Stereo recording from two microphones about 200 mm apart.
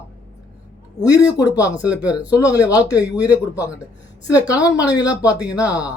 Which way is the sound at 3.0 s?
5° right (ahead or behind).